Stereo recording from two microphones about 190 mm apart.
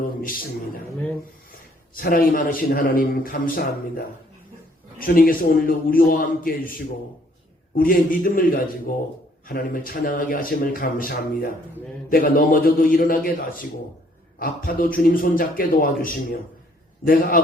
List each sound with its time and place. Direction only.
0.0 s a man's voice: 45° left (ahead or behind)
2.0 s a man's voice: 50° left (ahead or behind)